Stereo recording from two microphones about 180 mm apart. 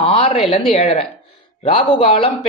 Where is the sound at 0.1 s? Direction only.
35° left (ahead or behind).